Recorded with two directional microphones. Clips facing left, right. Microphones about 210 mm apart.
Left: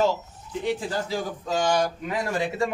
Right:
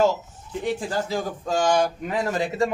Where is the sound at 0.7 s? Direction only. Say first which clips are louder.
Right 2 dB; 50° right (ahead or behind).